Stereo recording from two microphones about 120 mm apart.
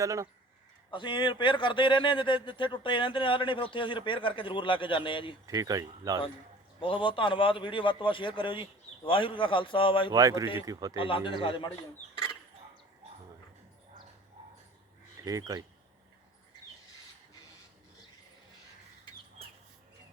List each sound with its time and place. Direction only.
0.0 s speech: 25° right (ahead or behind)
0.9 s speech: 40° left (ahead or behind)
5.5 s speech: 30° right (ahead or behind)
6.7 s speech: 45° left (ahead or behind)
10.1 s speech: 30° right (ahead or behind)
10.9 s speech: 45° left (ahead or behind)
15.2 s speech: 30° right (ahead or behind)